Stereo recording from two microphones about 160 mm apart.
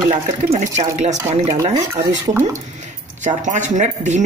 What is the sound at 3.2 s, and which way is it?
Speech, 50° right (ahead or behind).